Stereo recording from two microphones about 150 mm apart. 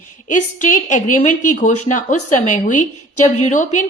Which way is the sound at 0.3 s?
55° left (ahead or behind).